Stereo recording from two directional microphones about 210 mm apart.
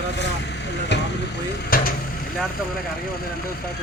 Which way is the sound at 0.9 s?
55° left (ahead or behind).